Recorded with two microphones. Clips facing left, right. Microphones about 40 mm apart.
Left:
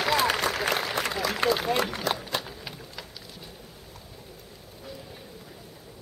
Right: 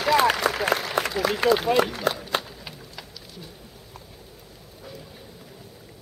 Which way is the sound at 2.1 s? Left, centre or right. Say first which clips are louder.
Right 3 dB; right.